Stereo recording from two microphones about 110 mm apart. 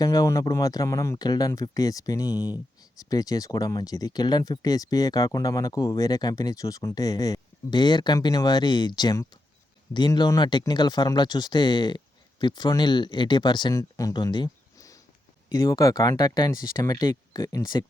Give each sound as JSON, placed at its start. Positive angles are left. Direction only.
{"t": 0.0, "sound": "speech", "side_deg": 35}